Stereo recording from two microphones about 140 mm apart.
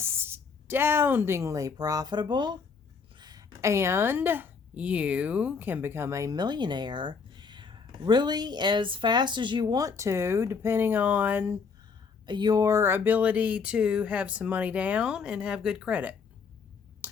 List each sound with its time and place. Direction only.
0.0 s a woman's voice: 15° right (ahead or behind)
12.2 s speech: 30° right (ahead or behind); by 16.1 s 10° right (ahead or behind)
17.0 s a sound: 15° right (ahead or behind)